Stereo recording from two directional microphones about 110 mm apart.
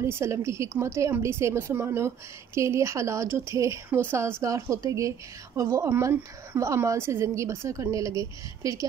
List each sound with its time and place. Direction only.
0.0 s a woman's voice: 25° right (ahead or behind)